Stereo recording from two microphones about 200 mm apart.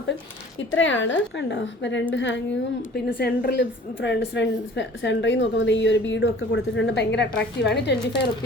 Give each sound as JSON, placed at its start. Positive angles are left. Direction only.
{"t": 0.8, "sound": "a woman's voice", "side_deg": 65}